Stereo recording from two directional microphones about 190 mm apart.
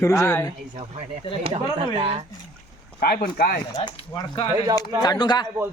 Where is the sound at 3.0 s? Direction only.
50° left (ahead or behind).